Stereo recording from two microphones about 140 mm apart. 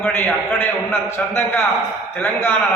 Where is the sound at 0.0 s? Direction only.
15° left (ahead or behind).